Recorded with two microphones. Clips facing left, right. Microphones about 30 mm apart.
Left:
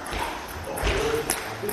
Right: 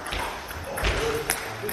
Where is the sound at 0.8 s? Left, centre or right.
Centre.